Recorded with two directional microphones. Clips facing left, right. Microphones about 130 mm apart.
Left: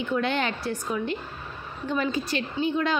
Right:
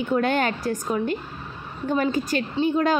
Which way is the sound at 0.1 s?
45° right (ahead or behind).